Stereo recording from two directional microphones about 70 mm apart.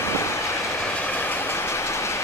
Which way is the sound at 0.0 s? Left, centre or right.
Left.